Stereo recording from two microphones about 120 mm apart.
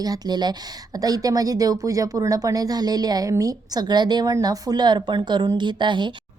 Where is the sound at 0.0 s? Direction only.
35° right (ahead or behind).